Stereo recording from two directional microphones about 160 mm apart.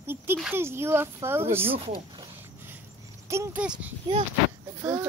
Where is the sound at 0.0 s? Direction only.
15° right (ahead or behind).